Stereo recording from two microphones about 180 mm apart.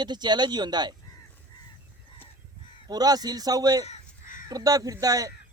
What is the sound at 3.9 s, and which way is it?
Crow, 45° left (ahead or behind).